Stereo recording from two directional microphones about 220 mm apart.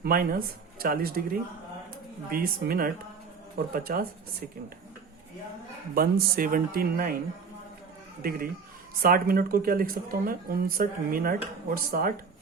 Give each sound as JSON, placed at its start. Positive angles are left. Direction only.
{"t": 0.0, "sound": "speech", "side_deg": -40}
{"t": 5.9, "sound": "speech", "side_deg": -40}
{"t": 9.0, "sound": "speech", "side_deg": -40}